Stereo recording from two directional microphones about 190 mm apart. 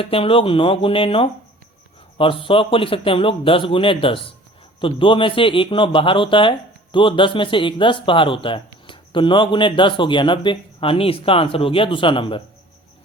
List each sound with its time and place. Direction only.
0.0 s speech: 30° left (ahead or behind)